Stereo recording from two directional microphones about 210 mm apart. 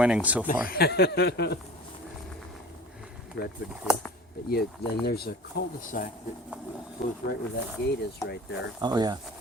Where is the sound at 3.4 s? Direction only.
55° left (ahead or behind).